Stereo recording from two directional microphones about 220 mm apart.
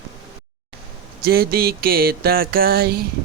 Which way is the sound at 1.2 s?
45° right (ahead or behind).